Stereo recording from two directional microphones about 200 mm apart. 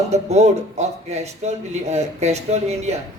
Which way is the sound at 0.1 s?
35° right (ahead or behind).